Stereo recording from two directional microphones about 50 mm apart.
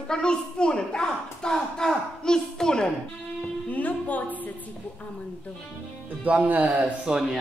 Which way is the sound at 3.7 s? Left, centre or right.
Left.